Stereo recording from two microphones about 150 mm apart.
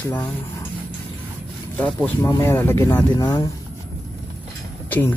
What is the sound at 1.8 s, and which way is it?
Speech, 10° left (ahead or behind).